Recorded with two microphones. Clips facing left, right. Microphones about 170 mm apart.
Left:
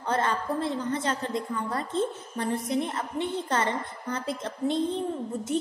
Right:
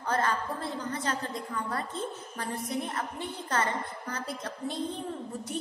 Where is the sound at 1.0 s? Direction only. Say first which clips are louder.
Left 4 dB; 25° left (ahead or behind).